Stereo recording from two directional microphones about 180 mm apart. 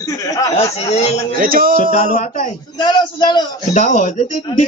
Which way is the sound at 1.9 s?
40° left (ahead or behind).